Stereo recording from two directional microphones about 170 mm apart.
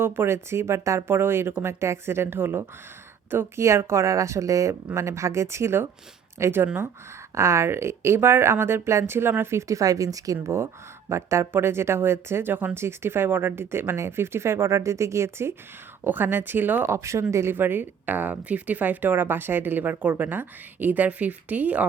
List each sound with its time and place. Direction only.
0.0 s speech: 15° right (ahead or behind)